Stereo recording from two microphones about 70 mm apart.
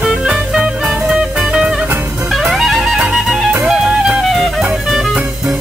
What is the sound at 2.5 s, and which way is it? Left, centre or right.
Music, centre.